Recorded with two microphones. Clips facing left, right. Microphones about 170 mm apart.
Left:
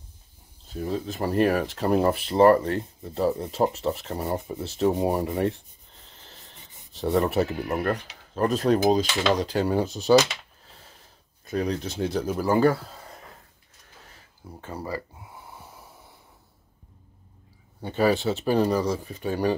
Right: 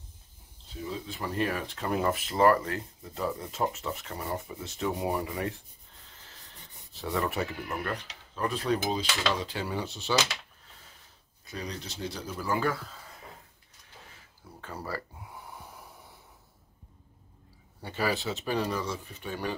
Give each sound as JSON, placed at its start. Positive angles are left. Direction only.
{"t": 0.7, "sound": "speech", "side_deg": 50}
{"t": 7.2, "sound": "speech", "side_deg": 40}
{"t": 11.4, "sound": "speech", "side_deg": 55}
{"t": 14.6, "sound": "speech", "side_deg": 15}
{"t": 18.4, "sound": "speech", "side_deg": 35}